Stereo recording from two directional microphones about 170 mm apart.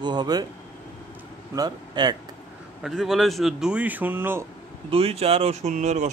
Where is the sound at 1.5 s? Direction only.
25° right (ahead or behind).